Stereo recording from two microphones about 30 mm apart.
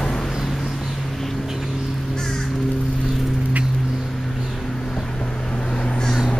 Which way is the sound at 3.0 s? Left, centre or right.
Centre.